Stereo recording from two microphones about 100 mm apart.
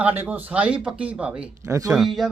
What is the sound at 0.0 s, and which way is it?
Speech, 20° right (ahead or behind).